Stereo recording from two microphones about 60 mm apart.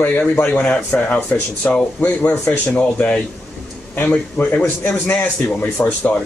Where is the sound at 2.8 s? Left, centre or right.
Left.